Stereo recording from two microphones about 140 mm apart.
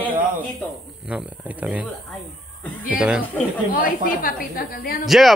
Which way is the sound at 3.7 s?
90° left.